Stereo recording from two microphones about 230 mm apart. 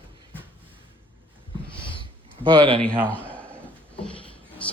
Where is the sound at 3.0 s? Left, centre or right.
Centre.